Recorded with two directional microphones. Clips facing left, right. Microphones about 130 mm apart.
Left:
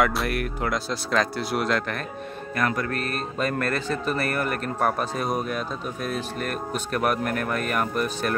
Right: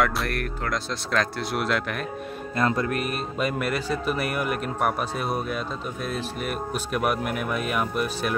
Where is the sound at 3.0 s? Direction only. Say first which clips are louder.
Right 1 dB; 10° right (ahead or behind).